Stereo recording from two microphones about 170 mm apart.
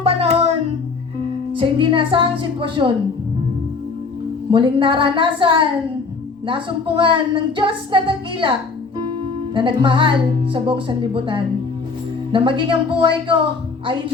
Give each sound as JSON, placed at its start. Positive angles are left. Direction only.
{"t": 0.0, "sound": "music", "side_deg": -35}
{"t": 1.5, "sound": "a woman's voice", "side_deg": -30}
{"t": 4.5, "sound": "a woman's voice", "side_deg": -30}
{"t": 9.6, "sound": "a woman's voice", "side_deg": -30}